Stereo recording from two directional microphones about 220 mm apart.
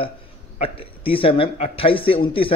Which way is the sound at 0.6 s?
25° left (ahead or behind).